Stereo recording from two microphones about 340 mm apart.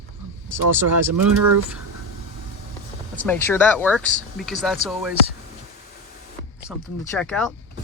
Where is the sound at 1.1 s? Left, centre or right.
Right.